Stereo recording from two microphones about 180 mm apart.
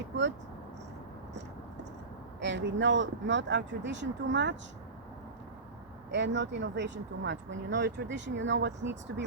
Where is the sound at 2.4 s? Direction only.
85° right.